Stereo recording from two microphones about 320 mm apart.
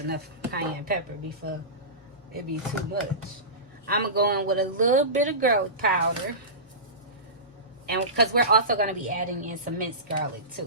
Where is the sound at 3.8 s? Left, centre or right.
Right.